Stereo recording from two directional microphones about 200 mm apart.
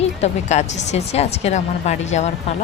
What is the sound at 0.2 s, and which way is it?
Speech, 35° left (ahead or behind).